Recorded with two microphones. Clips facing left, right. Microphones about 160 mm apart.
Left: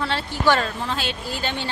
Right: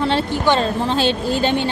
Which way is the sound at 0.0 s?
20° right (ahead or behind).